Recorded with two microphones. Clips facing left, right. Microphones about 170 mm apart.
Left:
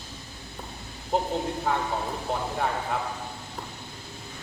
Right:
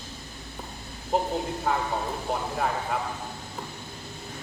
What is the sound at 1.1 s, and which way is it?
Speech, 5° right (ahead or behind).